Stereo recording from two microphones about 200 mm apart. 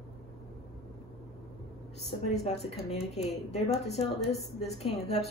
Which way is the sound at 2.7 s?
30° left (ahead or behind).